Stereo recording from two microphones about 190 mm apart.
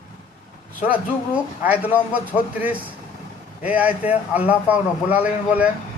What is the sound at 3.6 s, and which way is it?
A man's voice, 10° right (ahead or behind).